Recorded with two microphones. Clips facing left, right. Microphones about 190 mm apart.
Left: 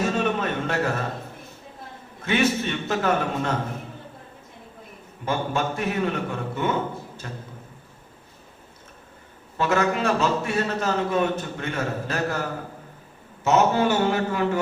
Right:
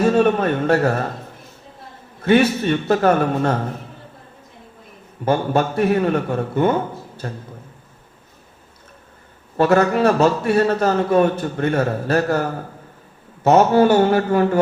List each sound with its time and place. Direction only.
0.0 s a sound: 45° right (ahead or behind)
2.2 s a man's voice: 45° right (ahead or behind)
5.2 s a man's voice: 40° right (ahead or behind)
9.6 s a man's voice: 45° right (ahead or behind)